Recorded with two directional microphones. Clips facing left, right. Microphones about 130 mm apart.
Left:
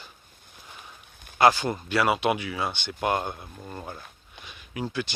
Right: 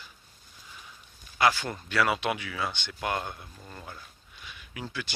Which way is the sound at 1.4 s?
25° left (ahead or behind).